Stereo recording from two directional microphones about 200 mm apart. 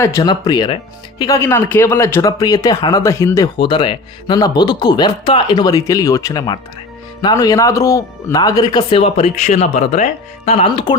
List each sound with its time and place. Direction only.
0.0 s speech: 15° left (ahead or behind)